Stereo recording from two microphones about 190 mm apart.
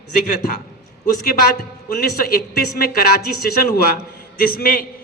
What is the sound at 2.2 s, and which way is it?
A man's voice, 55° left (ahead or behind).